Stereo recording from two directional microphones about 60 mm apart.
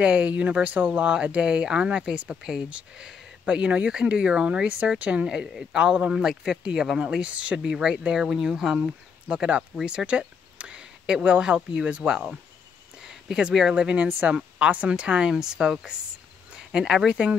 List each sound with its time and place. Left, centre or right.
0.0 s speech: right
17.1 s speech: centre